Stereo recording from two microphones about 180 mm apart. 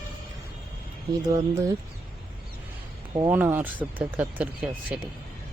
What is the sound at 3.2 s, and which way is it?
Speech, 10° right (ahead or behind).